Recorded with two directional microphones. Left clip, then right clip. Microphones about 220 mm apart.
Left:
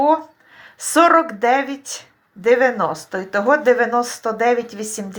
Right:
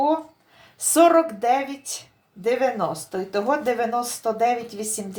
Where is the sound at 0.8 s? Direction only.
20° left (ahead or behind).